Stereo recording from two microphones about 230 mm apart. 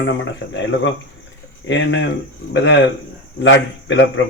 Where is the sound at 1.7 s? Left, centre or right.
Left.